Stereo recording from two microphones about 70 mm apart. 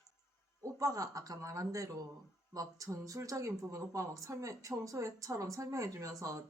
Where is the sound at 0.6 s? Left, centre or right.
Right.